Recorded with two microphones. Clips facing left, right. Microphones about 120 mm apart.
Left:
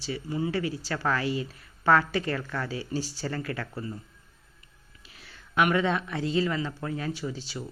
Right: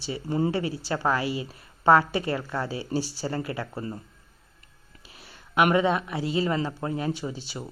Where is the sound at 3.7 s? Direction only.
35° right (ahead or behind).